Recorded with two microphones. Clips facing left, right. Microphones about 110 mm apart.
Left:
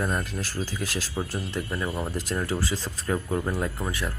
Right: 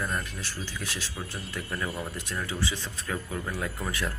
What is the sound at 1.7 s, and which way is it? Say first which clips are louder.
Speech: left 1 dB; 15° left (ahead or behind).